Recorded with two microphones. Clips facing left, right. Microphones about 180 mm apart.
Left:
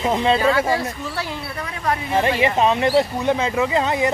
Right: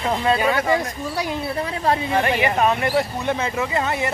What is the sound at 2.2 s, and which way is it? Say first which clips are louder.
Speech: left 1 dB; 25° left (ahead or behind).